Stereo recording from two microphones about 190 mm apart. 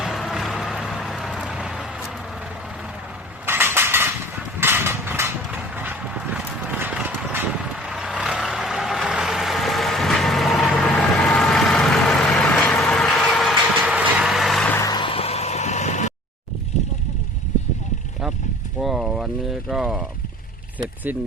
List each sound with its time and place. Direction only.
0.0 s vehicle: centre (ahead or behind)
3.4 s mechanisms: 10° right (ahead or behind)
14.8 s vehicle: 20° left (ahead or behind); by 16.1 s 40° left (ahead or behind)
18.8 s vehicle: centre (ahead or behind)